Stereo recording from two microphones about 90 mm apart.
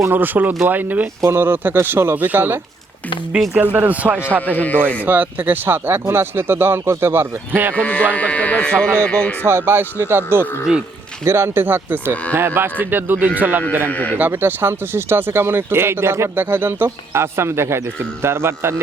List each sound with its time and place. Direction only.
0.1 s speech: 20° right (ahead or behind)
4.4 s speech: 20° left (ahead or behind)
5.0 s speech: 20° right (ahead or behind)
7.8 s speech: 15° left (ahead or behind)
9.4 s speech: 30° right (ahead or behind)
10.7 s speech: 10° right (ahead or behind)
11.3 s speech: 30° right (ahead or behind)
13.9 s speech: 20° left (ahead or behind)
14.2 s speech: 25° right (ahead or behind)